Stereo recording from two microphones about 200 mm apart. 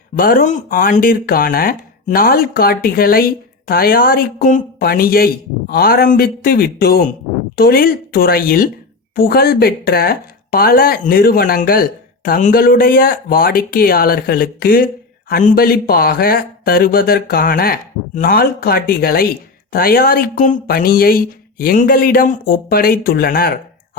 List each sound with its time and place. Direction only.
0.2 s speech: 45° left (ahead or behind)